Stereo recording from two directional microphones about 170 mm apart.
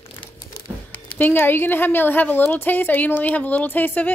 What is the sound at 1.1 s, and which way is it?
A woman's voice, 10° left (ahead or behind).